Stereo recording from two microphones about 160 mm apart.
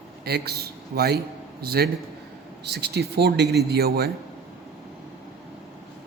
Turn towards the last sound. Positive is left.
turn(degrees=-80)